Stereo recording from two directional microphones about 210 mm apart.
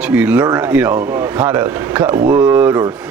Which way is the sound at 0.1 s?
5° right (ahead or behind).